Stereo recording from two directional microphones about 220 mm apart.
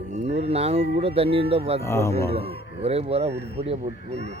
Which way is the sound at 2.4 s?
30° right (ahead or behind).